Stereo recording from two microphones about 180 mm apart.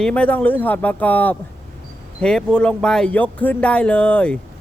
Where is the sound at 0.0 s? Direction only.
5° left (ahead or behind).